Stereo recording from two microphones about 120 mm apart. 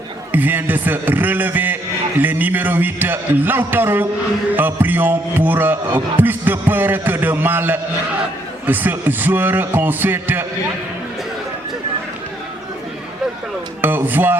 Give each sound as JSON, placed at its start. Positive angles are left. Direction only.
{"t": 0.3, "sound": "a man's voice", "side_deg": -15}
{"t": 13.8, "sound": "a man's voice", "side_deg": -15}